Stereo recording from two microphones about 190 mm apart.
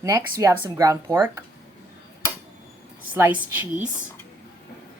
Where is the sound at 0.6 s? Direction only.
15° right (ahead or behind).